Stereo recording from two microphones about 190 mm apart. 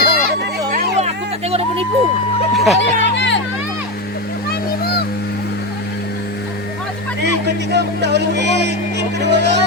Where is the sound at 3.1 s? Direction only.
70° left (ahead or behind).